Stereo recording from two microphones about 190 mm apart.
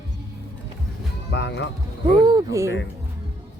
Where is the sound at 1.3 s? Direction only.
65° left (ahead or behind).